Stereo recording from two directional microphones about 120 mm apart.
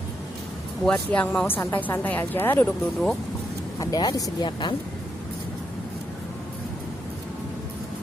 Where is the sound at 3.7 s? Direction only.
30° left (ahead or behind).